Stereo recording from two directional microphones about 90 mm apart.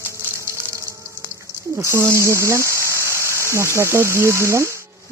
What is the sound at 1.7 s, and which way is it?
Speech, 30° right (ahead or behind).